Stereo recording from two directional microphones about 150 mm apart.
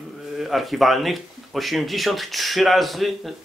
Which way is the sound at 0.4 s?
Centre (ahead or behind).